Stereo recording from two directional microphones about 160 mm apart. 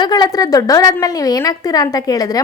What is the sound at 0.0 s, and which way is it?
A woman's voice, 25° left (ahead or behind).